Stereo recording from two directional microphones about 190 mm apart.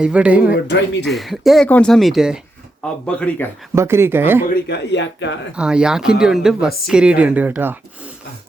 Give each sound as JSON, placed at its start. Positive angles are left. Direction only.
{"t": 0.0, "sound": "speech", "side_deg": -5}
{"t": 3.8, "sound": "speech", "side_deg": -15}
{"t": 4.4, "sound": "speech", "side_deg": 65}
{"t": 5.5, "sound": "speech", "side_deg": -5}